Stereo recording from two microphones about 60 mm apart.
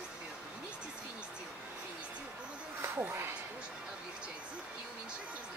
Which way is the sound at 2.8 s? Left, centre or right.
Right.